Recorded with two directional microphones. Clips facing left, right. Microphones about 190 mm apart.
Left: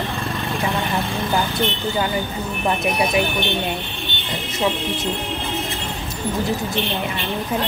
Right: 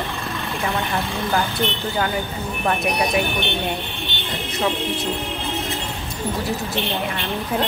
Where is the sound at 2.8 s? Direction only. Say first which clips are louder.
Left 2 dB; centre (ahead or behind).